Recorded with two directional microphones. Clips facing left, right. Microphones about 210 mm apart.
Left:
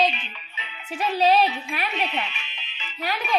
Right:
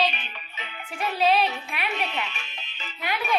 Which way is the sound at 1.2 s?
40° left (ahead or behind).